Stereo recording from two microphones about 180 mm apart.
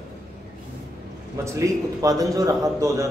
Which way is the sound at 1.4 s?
15° right (ahead or behind).